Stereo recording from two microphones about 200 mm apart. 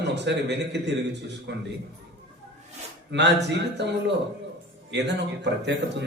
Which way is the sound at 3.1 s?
60° right (ahead or behind).